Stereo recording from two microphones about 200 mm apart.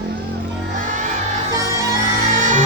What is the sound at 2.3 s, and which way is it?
Music, 40° right (ahead or behind).